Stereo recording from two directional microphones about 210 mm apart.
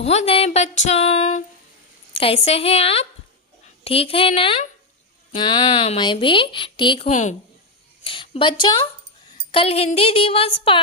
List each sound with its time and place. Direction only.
0.0 s speech: 30° left (ahead or behind)
7.1 s speech: 35° left (ahead or behind)
8.0 s speech: 25° left (ahead or behind)